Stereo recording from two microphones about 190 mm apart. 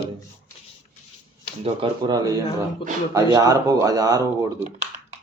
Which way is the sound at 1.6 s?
25° right (ahead or behind).